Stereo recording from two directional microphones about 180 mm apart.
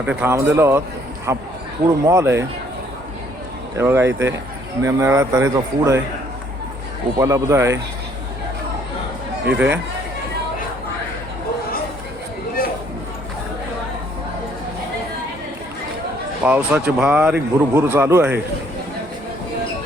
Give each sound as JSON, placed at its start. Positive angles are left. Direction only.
{"t": 0.0, "sound": "speech", "side_deg": -10}
{"t": 3.8, "sound": "speech", "side_deg": -15}
{"t": 7.2, "sound": "speech", "side_deg": -15}
{"t": 9.5, "sound": "speech", "side_deg": -10}
{"t": 16.4, "sound": "speech", "side_deg": -10}